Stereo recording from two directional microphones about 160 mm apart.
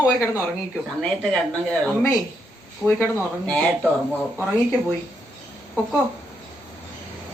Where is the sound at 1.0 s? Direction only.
5° left (ahead or behind).